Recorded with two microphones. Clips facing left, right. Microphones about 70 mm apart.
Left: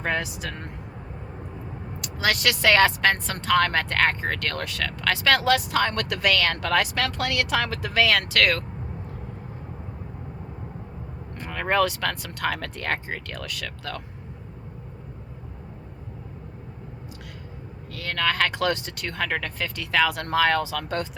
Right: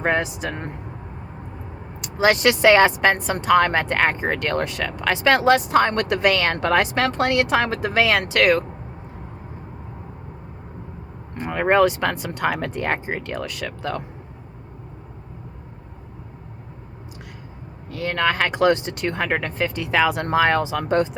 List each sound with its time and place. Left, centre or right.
0.0 s speech: right
2.0 s speech: right
11.3 s speech: right
17.9 s speech: right